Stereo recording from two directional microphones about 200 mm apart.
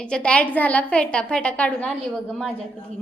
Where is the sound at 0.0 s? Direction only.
5° left (ahead or behind).